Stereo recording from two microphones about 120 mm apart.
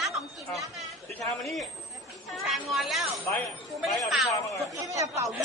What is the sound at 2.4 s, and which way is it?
Speech, centre (ahead or behind).